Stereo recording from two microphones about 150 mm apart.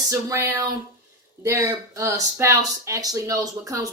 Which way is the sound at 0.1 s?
20° right (ahead or behind).